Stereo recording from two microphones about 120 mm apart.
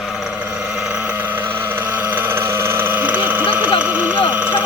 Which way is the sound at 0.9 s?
15° right (ahead or behind).